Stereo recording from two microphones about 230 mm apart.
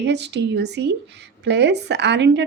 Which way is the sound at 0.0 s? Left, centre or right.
Right.